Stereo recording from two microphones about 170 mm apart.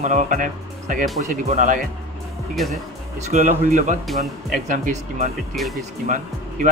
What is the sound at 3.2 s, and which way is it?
Speech, 45° right (ahead or behind).